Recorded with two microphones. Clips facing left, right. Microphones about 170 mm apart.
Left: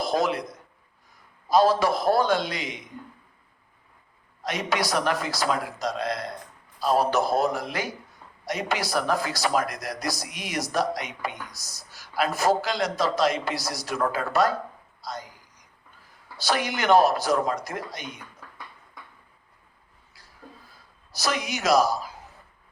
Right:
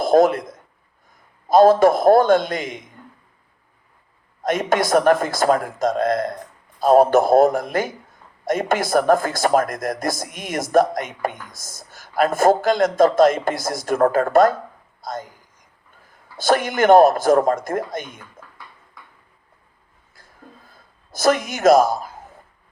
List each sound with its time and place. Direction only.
0.0 s a man's voice: 50° right (ahead or behind)
4.4 s a woman's voice: 50° right (ahead or behind)
20.1 s a sound: 50° right (ahead or behind)